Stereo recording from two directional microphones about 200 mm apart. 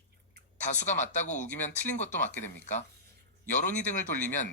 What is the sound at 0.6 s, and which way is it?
Speech, 35° left (ahead or behind).